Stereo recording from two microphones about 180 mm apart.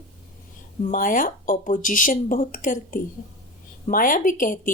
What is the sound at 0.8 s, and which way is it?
A woman's voice, 50° left (ahead or behind).